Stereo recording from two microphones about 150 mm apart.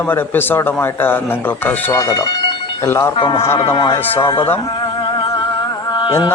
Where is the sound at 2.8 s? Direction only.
15° left (ahead or behind).